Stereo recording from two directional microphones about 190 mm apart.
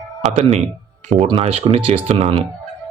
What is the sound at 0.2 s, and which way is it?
A man's voice, 35° right (ahead or behind).